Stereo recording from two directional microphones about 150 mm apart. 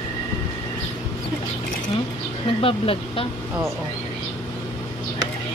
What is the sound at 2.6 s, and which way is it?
Speech, 40° left (ahead or behind).